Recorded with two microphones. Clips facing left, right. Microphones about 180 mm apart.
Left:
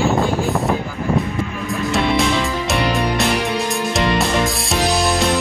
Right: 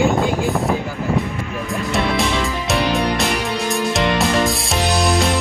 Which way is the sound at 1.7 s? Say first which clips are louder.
Left 2 dB; centre (ahead or behind).